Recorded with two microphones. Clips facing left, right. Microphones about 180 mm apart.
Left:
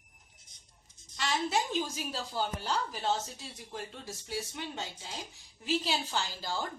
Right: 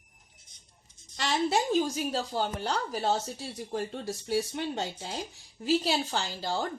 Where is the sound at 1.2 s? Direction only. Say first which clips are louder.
Right 4 dB; 40° right (ahead or behind).